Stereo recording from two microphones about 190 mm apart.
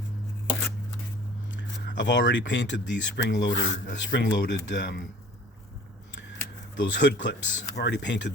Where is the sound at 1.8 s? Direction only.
70° left (ahead or behind).